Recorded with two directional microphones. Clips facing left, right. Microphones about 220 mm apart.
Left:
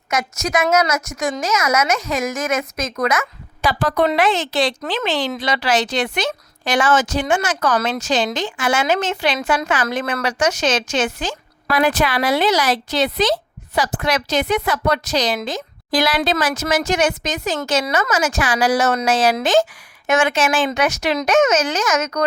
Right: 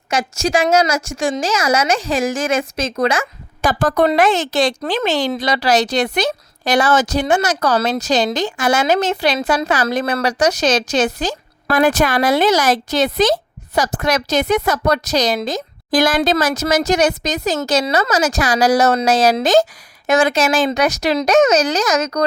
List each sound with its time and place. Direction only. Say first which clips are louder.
0.1 s a woman's voice: right 3 dB; 30° right (ahead or behind)
3.6 s a woman's voice: right 3 dB; 45° right (ahead or behind)